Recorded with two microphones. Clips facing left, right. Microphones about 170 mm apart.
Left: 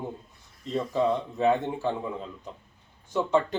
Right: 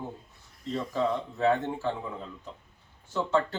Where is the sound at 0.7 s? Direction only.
15° left (ahead or behind).